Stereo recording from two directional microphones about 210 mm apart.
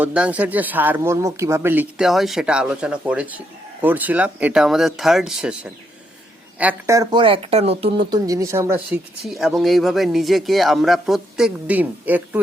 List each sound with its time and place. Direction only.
0.0 s speech: 5° right (ahead or behind)
9.2 s speech: centre (ahead or behind)